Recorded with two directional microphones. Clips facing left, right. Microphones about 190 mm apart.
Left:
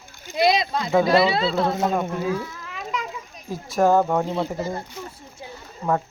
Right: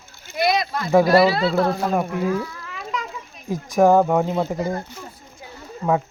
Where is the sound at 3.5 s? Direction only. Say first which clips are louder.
Right 3 dB; 15° right (ahead or behind).